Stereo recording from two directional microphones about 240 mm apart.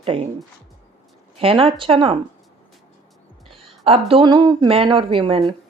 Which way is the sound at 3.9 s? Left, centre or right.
Right.